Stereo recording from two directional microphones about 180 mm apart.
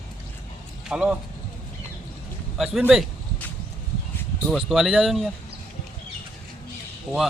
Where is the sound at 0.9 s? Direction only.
5° right (ahead or behind).